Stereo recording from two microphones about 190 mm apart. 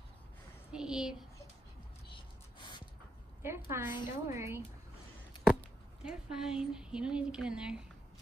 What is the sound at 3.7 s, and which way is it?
Speech, 15° right (ahead or behind).